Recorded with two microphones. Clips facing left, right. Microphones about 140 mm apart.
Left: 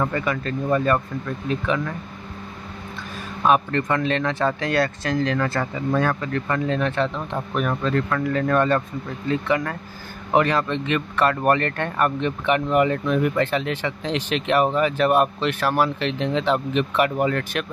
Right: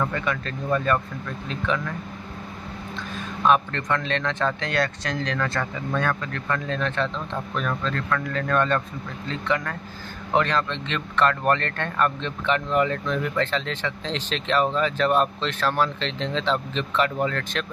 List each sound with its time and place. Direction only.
0.1 s speech: 5° left (ahead or behind)
3.4 s speech: 10° left (ahead or behind)